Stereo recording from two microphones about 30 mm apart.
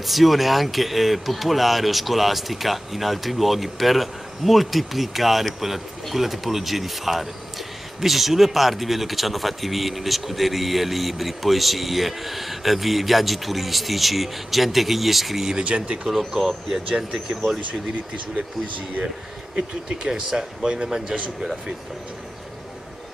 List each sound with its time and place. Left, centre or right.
0.0 s speech: centre
15.5 s speech: right
16.3 s speech: centre
18.3 s speech: right
20.0 s speech: right